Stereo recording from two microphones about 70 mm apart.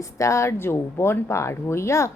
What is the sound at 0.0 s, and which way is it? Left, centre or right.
A woman's voice, left.